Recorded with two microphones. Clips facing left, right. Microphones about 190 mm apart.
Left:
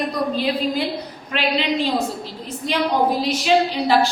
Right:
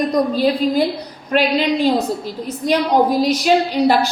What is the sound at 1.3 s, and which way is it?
Speech, 45° right (ahead or behind).